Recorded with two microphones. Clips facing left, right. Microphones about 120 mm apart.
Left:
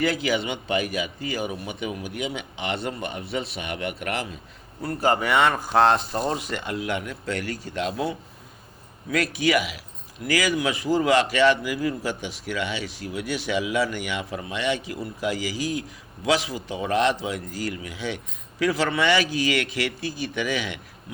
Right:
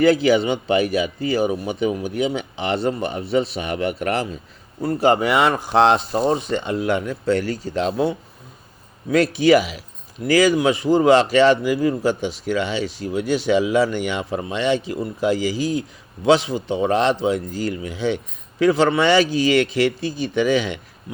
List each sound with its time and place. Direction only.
0.0 s a man's voice: 35° right (ahead or behind)